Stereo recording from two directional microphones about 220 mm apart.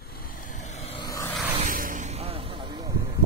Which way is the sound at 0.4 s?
35° left (ahead or behind).